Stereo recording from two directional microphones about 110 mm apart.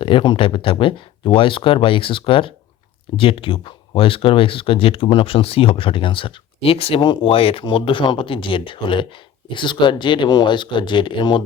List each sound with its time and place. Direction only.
0.0 s speech: 50° left (ahead or behind)
7.0 s speech: 45° left (ahead or behind)